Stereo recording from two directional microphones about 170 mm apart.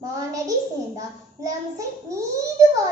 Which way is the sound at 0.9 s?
20° right (ahead or behind).